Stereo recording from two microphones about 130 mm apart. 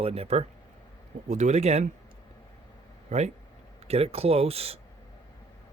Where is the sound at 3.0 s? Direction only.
60° right (ahead or behind).